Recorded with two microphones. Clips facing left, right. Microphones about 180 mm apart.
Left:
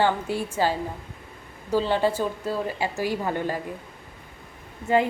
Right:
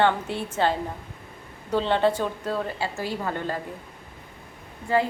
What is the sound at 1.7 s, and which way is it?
A woman's voice, 5° left (ahead or behind).